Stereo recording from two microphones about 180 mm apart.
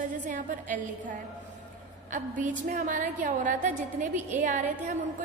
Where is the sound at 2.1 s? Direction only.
45° right (ahead or behind).